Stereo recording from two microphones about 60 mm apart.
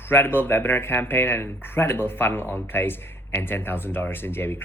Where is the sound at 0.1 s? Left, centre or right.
Left.